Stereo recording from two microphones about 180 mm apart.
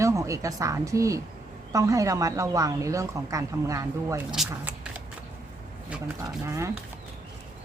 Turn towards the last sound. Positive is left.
turn(degrees=-20)  # may be behind; listen again after turning